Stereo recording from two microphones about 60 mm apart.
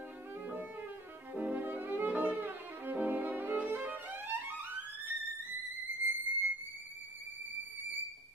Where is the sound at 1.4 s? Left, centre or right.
Right.